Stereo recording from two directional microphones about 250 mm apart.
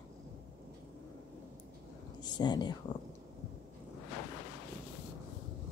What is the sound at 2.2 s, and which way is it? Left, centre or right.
Speech, centre.